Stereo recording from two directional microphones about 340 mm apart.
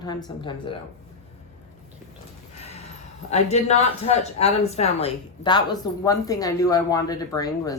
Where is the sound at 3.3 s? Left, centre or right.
Centre.